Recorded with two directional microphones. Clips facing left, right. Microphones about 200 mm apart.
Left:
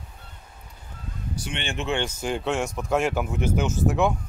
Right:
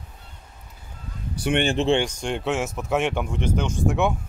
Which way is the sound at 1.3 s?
60° right (ahead or behind).